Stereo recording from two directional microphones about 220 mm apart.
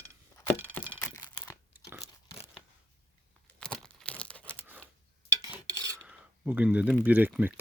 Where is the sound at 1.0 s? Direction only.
10° left (ahead or behind).